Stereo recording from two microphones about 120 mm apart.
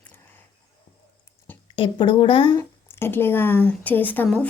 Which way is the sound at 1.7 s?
40° left (ahead or behind).